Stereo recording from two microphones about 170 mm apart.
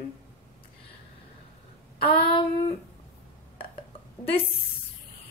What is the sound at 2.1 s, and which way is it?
Speech, 30° left (ahead or behind).